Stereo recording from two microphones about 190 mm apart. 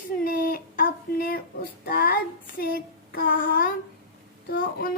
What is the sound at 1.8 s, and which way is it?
Child singing, 50° left (ahead or behind).